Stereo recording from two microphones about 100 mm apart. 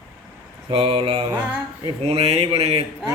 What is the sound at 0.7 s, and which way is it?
Mantra, 70° right (ahead or behind).